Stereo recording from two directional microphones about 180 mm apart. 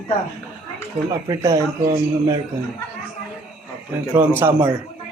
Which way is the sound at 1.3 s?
20° right (ahead or behind).